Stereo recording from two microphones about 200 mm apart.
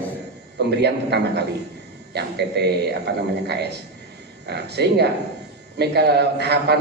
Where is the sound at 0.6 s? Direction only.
55° right (ahead or behind).